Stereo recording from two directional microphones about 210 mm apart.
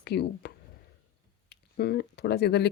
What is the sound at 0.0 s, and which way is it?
Speech, 50° left (ahead or behind).